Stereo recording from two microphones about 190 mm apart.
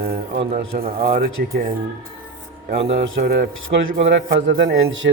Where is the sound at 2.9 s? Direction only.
60° right (ahead or behind).